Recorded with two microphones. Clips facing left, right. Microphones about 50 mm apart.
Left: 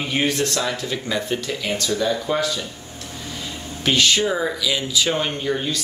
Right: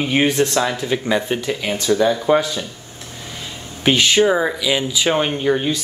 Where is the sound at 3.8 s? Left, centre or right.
Right.